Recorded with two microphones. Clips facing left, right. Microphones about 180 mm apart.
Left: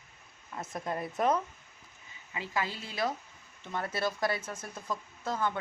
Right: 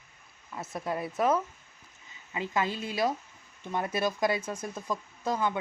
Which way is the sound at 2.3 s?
20° right (ahead or behind).